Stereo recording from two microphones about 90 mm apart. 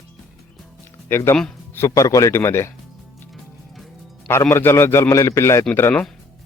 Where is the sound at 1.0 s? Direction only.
30° left (ahead or behind).